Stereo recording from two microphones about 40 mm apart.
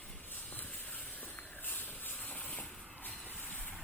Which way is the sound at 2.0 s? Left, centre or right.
Left.